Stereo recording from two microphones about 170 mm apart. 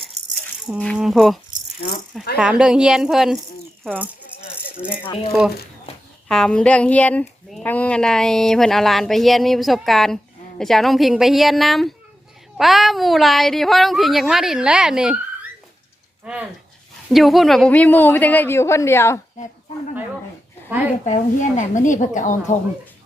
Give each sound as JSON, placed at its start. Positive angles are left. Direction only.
{"t": 0.9, "sound": "speech", "side_deg": 0}
{"t": 2.4, "sound": "speech", "side_deg": -5}
{"t": 5.0, "sound": "speech", "side_deg": 30}
{"t": 6.2, "sound": "a woman's voice", "side_deg": 5}
{"t": 21.0, "sound": "a woman's voice", "side_deg": 45}